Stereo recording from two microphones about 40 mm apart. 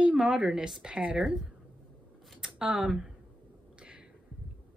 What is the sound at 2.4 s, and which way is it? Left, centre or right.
Speech, centre.